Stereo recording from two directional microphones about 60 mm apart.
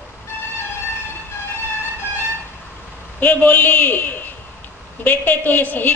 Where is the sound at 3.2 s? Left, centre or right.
Left.